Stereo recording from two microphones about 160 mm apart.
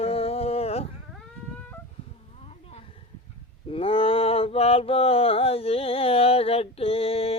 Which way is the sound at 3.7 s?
35° left (ahead or behind).